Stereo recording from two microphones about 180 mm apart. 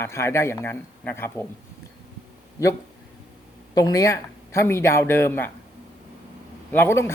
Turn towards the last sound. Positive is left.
turn(degrees=15)  # may be behind; listen again after turning